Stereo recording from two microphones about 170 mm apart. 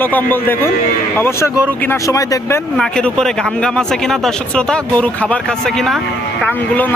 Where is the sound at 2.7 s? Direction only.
5° left (ahead or behind).